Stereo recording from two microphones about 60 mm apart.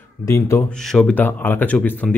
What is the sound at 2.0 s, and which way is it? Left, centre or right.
Speech, centre.